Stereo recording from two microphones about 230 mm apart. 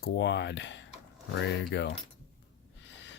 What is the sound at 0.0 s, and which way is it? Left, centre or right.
Speech, left.